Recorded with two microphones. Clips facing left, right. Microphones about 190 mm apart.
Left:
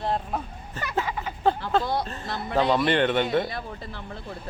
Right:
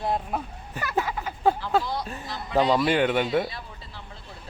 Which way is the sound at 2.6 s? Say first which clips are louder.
Right 1 dB; 10° right (ahead or behind).